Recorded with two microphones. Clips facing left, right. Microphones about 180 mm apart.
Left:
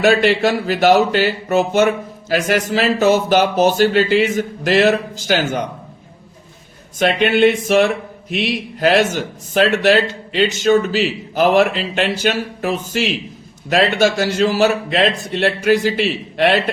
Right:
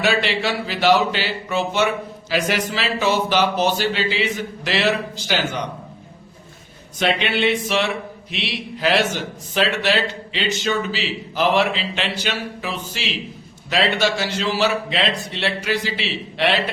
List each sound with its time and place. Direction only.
0.0 s speech: 45° left (ahead or behind)
7.0 s speech: 50° left (ahead or behind)